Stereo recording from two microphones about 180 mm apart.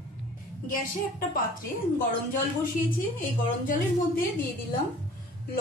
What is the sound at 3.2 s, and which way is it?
A woman's voice, 50° left (ahead or behind).